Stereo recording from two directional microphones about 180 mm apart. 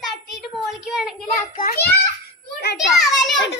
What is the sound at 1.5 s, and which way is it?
Speech, 50° left (ahead or behind).